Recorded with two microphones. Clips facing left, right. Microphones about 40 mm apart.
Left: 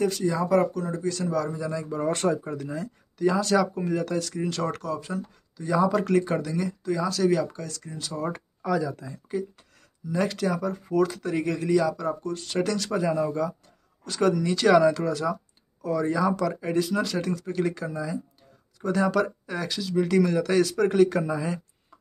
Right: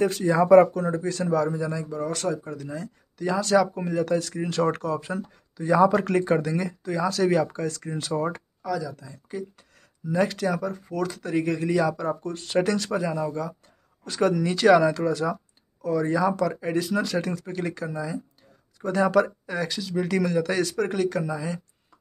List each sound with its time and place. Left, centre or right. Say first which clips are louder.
0.0 s speech: right 3 dB; right
1.0 s speech: right 1 dB; centre
1.9 s speech: left 3 dB; centre; by 7.9 s right
8.6 s speech: left 3 dB; centre
9.3 s speech: left 3 dB; centre
13.0 s speech: left 2 dB; centre
14.0 s speech: even; centre